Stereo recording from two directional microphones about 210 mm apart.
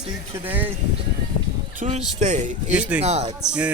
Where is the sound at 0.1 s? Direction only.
10° right (ahead or behind).